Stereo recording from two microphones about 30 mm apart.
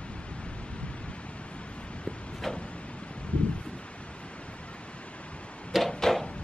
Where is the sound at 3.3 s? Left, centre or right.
Left.